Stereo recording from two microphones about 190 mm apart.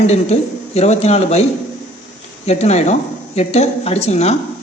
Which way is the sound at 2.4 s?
35° left (ahead or behind).